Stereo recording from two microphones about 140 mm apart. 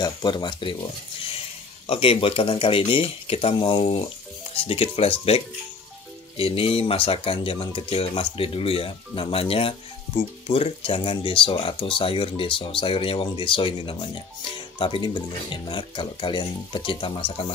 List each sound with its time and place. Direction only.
0.0 s speech: 30° left (ahead or behind)
1.9 s speech: 45° left (ahead or behind)